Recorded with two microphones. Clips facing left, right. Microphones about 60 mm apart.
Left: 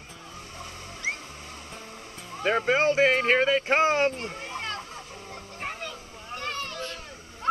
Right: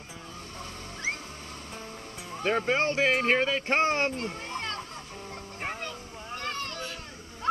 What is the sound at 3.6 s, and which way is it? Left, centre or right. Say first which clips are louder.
A child's voice: left 3 dB; centre.